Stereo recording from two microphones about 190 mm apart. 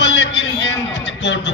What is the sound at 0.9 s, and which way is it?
Music, 65° left (ahead or behind).